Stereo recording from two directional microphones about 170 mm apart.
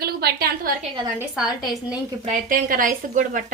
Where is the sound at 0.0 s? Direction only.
65° right (ahead or behind).